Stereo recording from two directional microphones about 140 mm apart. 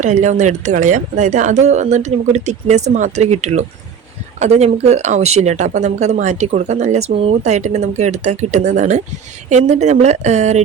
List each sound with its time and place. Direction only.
0.0 s speech: 60° right (ahead or behind)